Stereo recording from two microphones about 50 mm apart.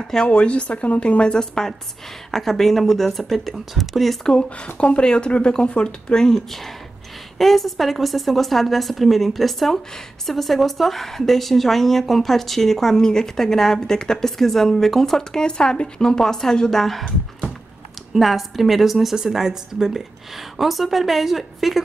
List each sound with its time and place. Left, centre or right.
0.1 s a woman's voice: centre
4.6 s a woman's voice: left; by 17.0 s centre
18.1 s a woman's voice: centre